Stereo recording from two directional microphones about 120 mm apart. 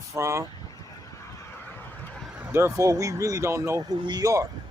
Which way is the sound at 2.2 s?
10° right (ahead or behind).